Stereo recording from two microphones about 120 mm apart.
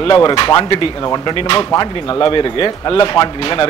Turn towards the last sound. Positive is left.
turn(degrees=45)  # may be behind; listen again after turning